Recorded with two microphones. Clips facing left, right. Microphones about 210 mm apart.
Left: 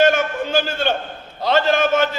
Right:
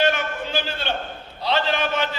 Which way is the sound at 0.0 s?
45° left (ahead or behind).